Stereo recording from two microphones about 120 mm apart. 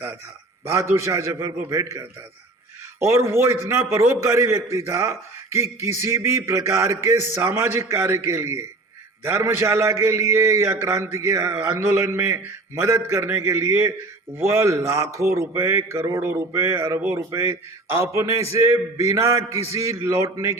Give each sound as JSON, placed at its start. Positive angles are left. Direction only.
{"t": 0.6, "sound": "speech", "side_deg": -25}